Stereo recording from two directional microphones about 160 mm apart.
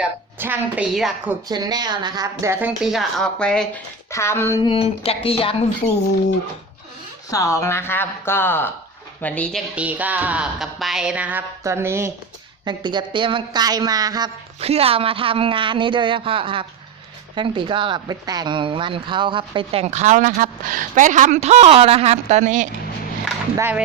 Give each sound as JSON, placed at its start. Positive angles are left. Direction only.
{"t": 0.3, "sound": "music", "side_deg": -10}
{"t": 1.5, "sound": "music", "side_deg": -25}
{"t": 4.1, "sound": "speech", "side_deg": 15}
{"t": 4.6, "sound": "speech", "side_deg": 35}
{"t": 7.3, "sound": "speech", "side_deg": 20}
{"t": 9.7, "sound": "music", "side_deg": -10}
{"t": 12.6, "sound": "a woman's voice", "side_deg": -30}
{"t": 14.6, "sound": "a woman's voice", "side_deg": -40}
{"t": 23.6, "sound": "music", "side_deg": -10}